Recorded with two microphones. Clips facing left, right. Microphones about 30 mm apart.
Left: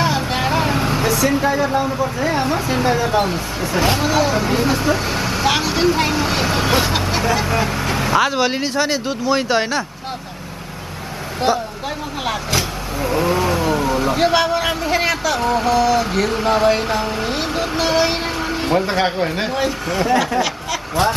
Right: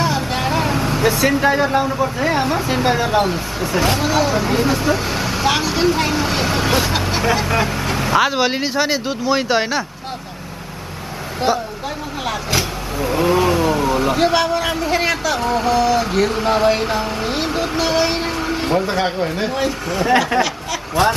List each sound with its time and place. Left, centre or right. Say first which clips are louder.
0.0 s vehicle: left 1 dB; centre
1.0 s vehicle: right 3 dB; right
1.4 s speech: right 2 dB; right
1.7 s speech: right 1 dB; centre
3.3 s speech: right 1 dB; centre
11.5 s speech: even; centre
18.9 s speech: left 1 dB; centre